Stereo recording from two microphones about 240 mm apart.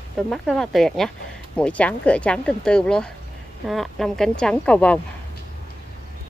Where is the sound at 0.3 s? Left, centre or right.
Centre.